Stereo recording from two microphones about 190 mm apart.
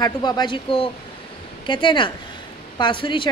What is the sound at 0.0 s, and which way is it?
A woman's voice, 20° left (ahead or behind).